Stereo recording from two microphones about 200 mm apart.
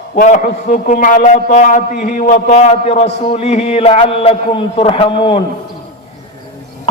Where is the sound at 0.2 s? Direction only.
40° left (ahead or behind); by 5.4 s 25° left (ahead or behind).